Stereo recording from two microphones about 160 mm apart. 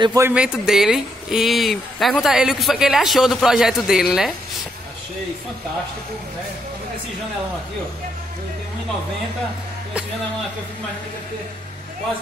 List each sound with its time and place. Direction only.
0.0 s speech: 20° right (ahead or behind)
0.3 s speech: 5° right (ahead or behind)